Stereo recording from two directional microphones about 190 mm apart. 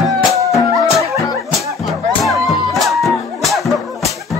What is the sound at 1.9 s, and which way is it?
Music, centre (ahead or behind).